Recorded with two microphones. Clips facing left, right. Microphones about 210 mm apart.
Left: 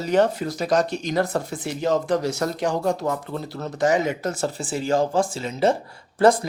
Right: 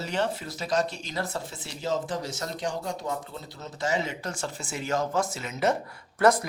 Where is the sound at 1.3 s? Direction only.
60° left (ahead or behind).